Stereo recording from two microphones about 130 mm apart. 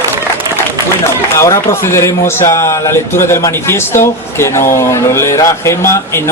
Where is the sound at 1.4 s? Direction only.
20° left (ahead or behind).